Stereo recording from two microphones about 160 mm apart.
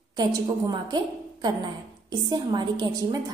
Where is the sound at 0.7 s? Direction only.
25° right (ahead or behind).